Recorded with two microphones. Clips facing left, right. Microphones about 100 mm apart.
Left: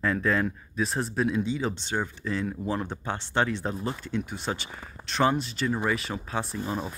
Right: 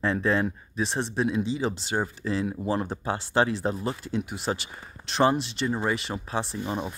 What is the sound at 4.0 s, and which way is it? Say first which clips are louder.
Speech: right 1 dB; 35° right (ahead or behind).